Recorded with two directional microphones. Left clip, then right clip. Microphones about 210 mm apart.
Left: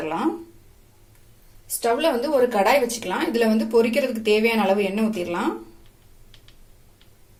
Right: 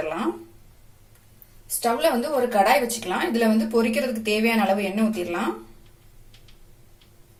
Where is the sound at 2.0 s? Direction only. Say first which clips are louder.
Left 3 dB; 30° left (ahead or behind).